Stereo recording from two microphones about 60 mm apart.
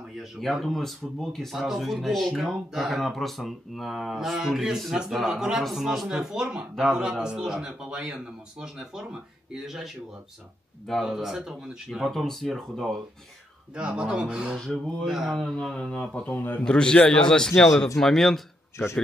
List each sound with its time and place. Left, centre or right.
0.2 s a man's voice: centre
12.1 s speech: centre
13.7 s a man's voice: centre
15.5 s a man's voice: centre
16.3 s a man's voice: left
16.6 s a man's voice: centre